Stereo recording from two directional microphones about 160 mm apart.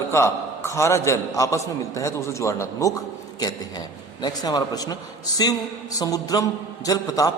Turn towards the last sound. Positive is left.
turn(degrees=20)  # may be behind; listen again after turning